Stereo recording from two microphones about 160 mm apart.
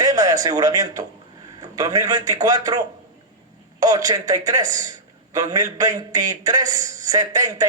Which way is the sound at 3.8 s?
25° right (ahead or behind).